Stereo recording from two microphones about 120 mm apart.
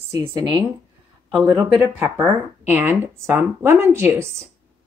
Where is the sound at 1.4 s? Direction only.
20° right (ahead or behind).